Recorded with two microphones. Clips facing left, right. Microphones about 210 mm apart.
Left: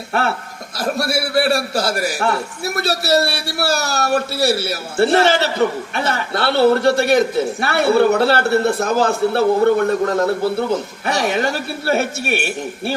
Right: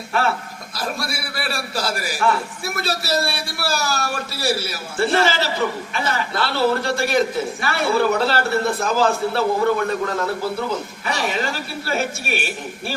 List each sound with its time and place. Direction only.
0.9 s a man's voice: 65° left (ahead or behind)